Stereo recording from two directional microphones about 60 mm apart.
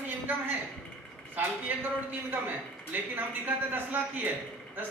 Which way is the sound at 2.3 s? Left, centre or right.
Right.